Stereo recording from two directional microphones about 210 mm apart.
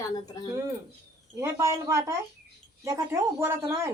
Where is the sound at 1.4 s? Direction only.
15° right (ahead or behind).